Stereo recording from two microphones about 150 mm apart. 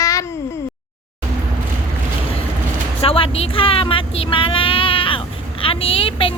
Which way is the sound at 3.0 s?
40° left (ahead or behind).